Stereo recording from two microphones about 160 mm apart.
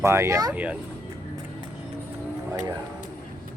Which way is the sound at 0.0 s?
15° right (ahead or behind).